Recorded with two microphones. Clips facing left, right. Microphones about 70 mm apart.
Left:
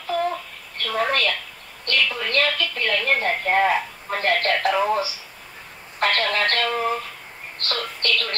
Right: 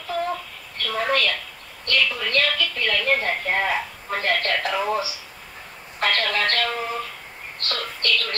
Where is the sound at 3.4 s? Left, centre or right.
Left.